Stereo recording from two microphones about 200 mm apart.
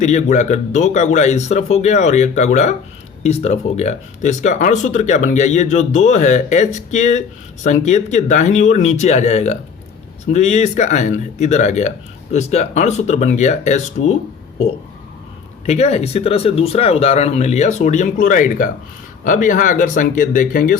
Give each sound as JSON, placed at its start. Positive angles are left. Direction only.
{"t": 0.0, "sound": "speech", "side_deg": 35}
{"t": 15.6, "sound": "speech", "side_deg": 35}